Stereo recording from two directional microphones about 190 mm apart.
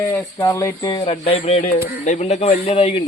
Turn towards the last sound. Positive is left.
turn(degrees=30)  # may be behind; listen again after turning